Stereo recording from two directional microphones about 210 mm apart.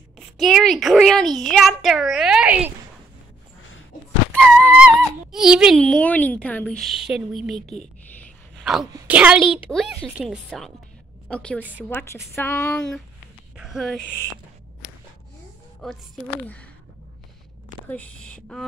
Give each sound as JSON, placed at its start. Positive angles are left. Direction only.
{"t": 0.4, "sound": "a child's voice", "side_deg": 0}
{"t": 4.4, "sound": "speech", "side_deg": -5}
{"t": 7.6, "sound": "speech", "side_deg": 30}
{"t": 8.2, "sound": "sigh", "side_deg": 0}
{"t": 8.9, "sound": "a woman's voice", "side_deg": -5}
{"t": 11.9, "sound": "a sound", "side_deg": 10}
{"t": 13.6, "sound": "speech", "side_deg": 0}
{"t": 15.8, "sound": "a child's voice", "side_deg": 0}
{"t": 17.8, "sound": "a child's voice", "side_deg": 5}